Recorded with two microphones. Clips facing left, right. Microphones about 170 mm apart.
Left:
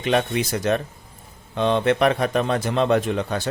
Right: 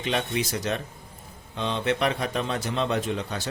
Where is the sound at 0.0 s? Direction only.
60° left (ahead or behind).